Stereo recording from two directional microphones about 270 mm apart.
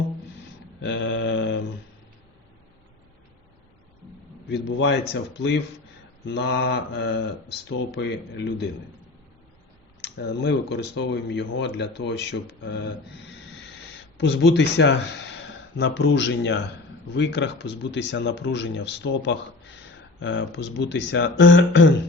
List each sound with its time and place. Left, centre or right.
0.8 s mantra: left
4.4 s speech: left
10.0 s speech: left